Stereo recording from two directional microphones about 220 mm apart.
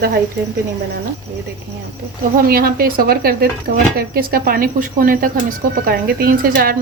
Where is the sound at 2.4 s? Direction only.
40° right (ahead or behind).